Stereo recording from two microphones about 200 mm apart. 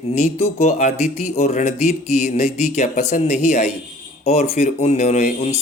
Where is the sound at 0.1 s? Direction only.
30° left (ahead or behind).